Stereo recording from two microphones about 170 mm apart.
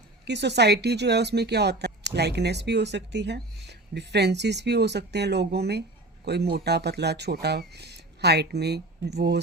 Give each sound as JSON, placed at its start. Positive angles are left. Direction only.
{"t": 0.3, "sound": "speech", "side_deg": -90}